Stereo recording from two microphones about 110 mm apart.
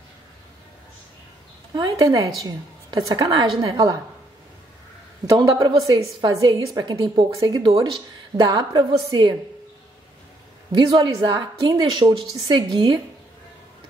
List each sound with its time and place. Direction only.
1.8 s a woman's voice: 35° right (ahead or behind)
5.2 s a woman's voice: 35° right (ahead or behind)
10.7 s a woman's voice: 40° right (ahead or behind)